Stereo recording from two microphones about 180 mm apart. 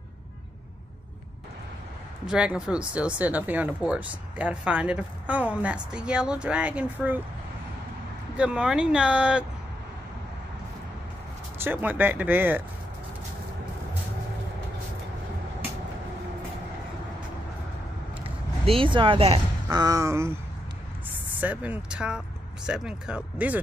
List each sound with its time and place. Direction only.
2.2 s speech: 5° right (ahead or behind)
8.4 s speech: 5° right (ahead or behind)
11.5 s speech: 10° right (ahead or behind)
18.7 s speech: 30° right (ahead or behind)
21.4 s speech: 10° right (ahead or behind)